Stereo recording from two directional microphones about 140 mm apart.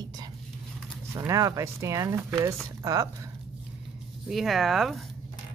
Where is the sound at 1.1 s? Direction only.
25° right (ahead or behind).